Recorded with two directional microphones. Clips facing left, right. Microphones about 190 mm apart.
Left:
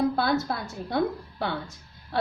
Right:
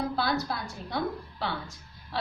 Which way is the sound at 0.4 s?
50° left (ahead or behind).